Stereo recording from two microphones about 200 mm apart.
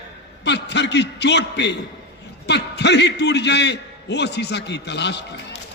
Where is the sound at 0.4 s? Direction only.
60° left (ahead or behind).